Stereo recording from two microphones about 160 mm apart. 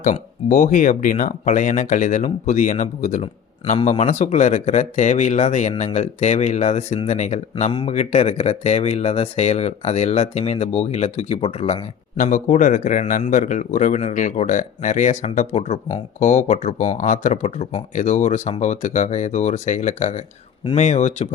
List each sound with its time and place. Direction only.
0.0 s a man's voice: 55° left (ahead or behind); by 11.8 s 35° left (ahead or behind)
12.1 s a man's voice: 55° left (ahead or behind)